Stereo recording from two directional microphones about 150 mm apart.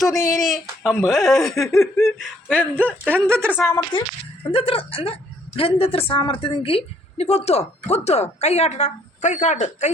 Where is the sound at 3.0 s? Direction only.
15° right (ahead or behind).